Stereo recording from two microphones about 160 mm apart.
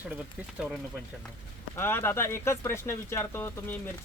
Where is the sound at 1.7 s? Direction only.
15° left (ahead or behind).